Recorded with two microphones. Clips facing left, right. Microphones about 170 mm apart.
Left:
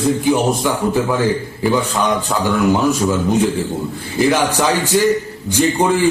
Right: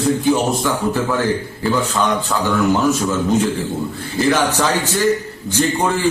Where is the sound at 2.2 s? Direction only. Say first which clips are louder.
Left 1 dB; 15° left (ahead or behind).